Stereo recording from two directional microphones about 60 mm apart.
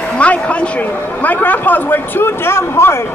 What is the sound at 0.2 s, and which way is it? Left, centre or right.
A man's voice, left.